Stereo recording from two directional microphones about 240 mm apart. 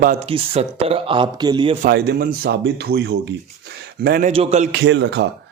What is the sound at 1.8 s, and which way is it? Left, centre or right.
Speech, right.